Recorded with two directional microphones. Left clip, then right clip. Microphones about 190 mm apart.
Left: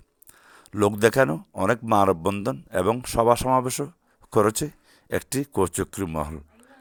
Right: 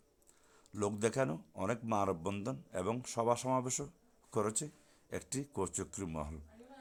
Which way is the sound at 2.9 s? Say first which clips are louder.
Left 13 dB; 30° left (ahead or behind).